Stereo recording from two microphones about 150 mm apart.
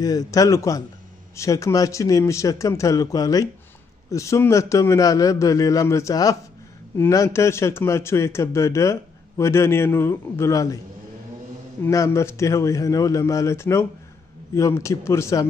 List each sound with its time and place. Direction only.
0.0 s a man's voice: 25° left (ahead or behind)
11.8 s a man's voice: 20° left (ahead or behind)